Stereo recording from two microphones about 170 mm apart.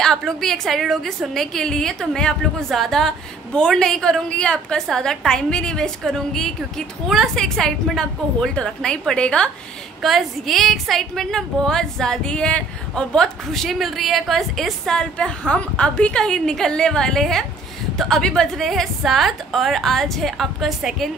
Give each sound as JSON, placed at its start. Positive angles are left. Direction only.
{"t": 0.0, "sound": "a woman's voice", "side_deg": 0}